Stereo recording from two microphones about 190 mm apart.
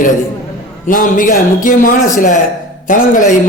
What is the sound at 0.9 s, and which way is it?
A man's voice, 45° left (ahead or behind).